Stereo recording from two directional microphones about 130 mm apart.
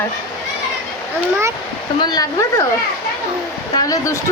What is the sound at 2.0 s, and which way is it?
Speech, 30° left (ahead or behind).